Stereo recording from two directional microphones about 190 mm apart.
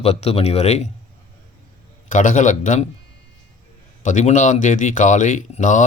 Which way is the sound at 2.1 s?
40° left (ahead or behind).